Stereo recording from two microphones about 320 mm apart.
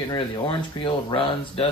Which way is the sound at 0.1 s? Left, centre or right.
Centre.